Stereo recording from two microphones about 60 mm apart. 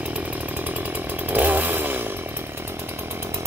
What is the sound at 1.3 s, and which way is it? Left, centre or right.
Chainsaw, right.